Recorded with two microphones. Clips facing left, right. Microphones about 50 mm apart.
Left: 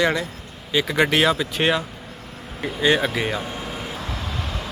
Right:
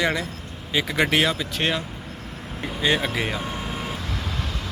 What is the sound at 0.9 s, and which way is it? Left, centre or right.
Speech, centre.